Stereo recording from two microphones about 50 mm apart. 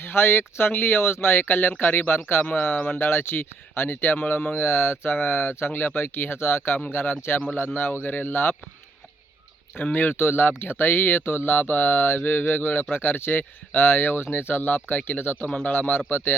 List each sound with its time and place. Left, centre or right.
0.0 s speech: left
1.8 s mantra: left
3.0 s speech: left
4.2 s speech: left
7.5 s mantra: left
8.0 s speech: left
9.7 s mantra: left
10.2 s speech: left
10.6 s mantra: left
15.4 s a man's voice: left
15.9 s mantra: left